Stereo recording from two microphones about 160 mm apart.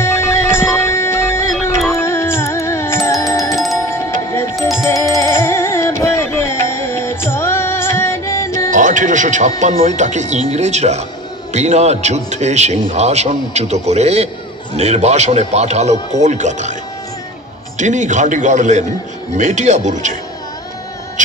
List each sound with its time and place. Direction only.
0.0 s music: 15° left (ahead or behind)
3.5 s music: centre (ahead or behind)
3.9 s music: 15° left (ahead or behind)
4.6 s music: centre (ahead or behind)
5.1 s music: 15° left (ahead or behind)
8.6 s music: 55° right (ahead or behind)
9.6 s a man's voice: 45° right (ahead or behind)
17.7 s a man's voice: 50° right (ahead or behind)